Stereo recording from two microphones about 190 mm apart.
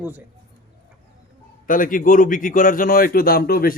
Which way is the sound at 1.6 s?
45° left (ahead or behind).